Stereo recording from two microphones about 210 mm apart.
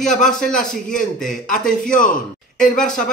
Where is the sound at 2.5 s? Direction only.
5° left (ahead or behind).